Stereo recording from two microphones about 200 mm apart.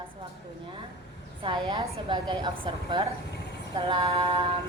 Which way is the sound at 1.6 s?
25° right (ahead or behind).